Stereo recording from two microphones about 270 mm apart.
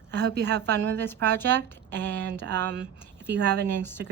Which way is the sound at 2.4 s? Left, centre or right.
Right.